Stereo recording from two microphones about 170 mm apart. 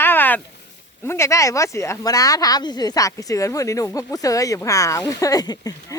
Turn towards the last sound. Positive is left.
turn(degrees=20)  # may be behind; listen again after turning